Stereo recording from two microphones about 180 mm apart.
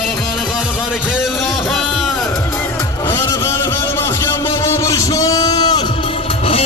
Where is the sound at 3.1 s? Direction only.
15° left (ahead or behind).